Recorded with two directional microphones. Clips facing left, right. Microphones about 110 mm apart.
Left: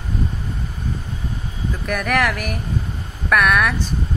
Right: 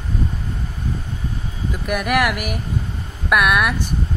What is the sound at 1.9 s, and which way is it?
Speech, 10° right (ahead or behind).